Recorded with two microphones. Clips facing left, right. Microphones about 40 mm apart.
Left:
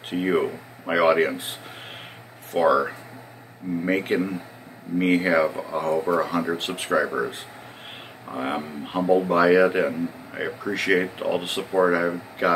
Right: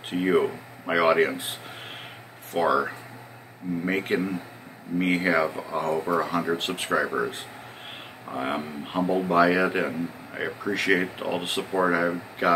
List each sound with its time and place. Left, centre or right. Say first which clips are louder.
0.1 s a man's voice: even; centre
2.5 s a man's voice: left 3 dB; centre